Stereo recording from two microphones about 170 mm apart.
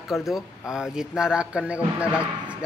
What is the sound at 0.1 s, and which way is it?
A man's voice, centre (ahead or behind).